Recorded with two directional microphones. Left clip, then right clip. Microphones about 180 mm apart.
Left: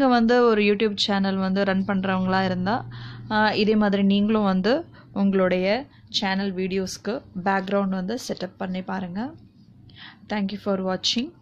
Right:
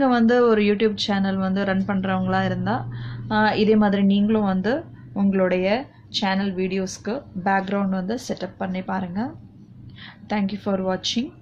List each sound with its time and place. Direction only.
0.0 s a woman's voice: 45° left (ahead or behind)